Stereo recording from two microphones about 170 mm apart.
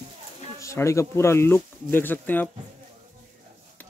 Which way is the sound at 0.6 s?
15° left (ahead or behind).